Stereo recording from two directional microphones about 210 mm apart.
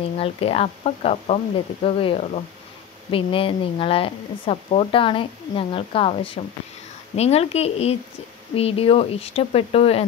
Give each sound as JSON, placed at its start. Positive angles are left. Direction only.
{"t": 0.2, "sound": "speech", "side_deg": 25}